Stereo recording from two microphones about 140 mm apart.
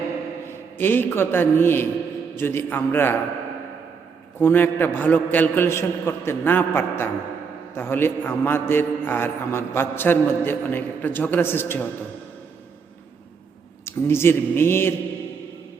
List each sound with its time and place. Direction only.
0.8 s a man's voice: 15° left (ahead or behind)
4.4 s a man's voice: 15° left (ahead or behind)
13.8 s a man's voice: 15° left (ahead or behind)